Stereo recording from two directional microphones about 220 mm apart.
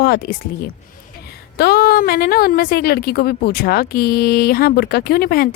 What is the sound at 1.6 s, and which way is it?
A woman's voice, 45° left (ahead or behind).